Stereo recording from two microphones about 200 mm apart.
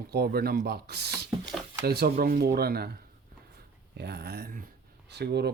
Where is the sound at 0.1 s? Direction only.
50° right (ahead or behind).